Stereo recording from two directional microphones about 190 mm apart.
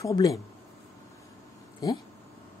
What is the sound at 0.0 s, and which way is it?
Speech, 20° left (ahead or behind).